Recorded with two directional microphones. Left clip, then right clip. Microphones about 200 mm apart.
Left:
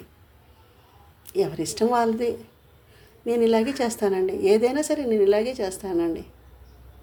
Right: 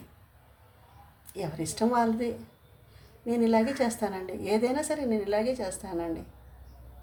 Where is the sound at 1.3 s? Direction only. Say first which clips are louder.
Left 10 dB; 35° left (ahead or behind).